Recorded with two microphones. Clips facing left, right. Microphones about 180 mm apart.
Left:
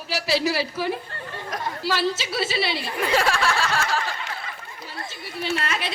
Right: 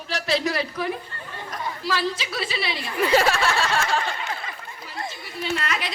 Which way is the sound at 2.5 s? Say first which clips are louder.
Left 3 dB; 30° left (ahead or behind).